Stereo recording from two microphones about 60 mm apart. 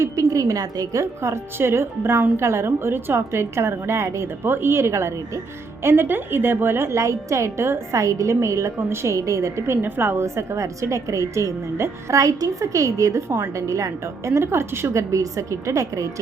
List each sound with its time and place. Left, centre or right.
0.0 s a woman's voice: right
1.2 s a woman's voice: right
5.8 s a woman's voice: right
6.9 s a woman's voice: right
8.0 s a woman's voice: right
9.1 s a woman's voice: right
9.8 s a woman's voice: right
10.2 s a woman's voice: right
13.2 s a woman's voice: right
13.6 s a woman's voice: right
15.1 s a woman's voice: right